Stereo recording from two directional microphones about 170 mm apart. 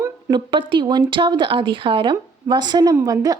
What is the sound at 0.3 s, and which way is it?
A woman's voice, 25° right (ahead or behind).